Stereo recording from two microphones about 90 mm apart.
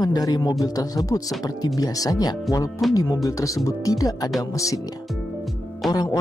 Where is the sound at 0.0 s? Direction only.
45° left (ahead or behind).